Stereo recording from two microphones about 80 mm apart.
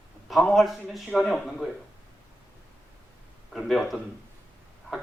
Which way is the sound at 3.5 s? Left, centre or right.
Centre.